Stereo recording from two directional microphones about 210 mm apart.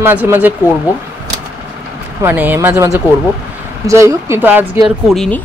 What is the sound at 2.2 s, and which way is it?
Speech, 10° right (ahead or behind).